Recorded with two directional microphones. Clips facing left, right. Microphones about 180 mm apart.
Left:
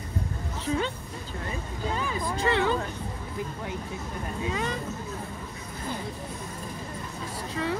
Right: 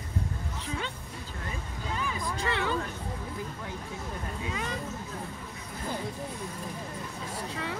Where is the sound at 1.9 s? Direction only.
35° left (ahead or behind).